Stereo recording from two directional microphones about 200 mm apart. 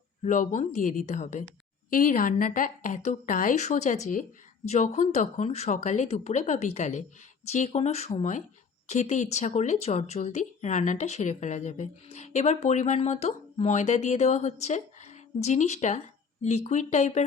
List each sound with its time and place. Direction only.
0.2 s speech: 40° left (ahead or behind)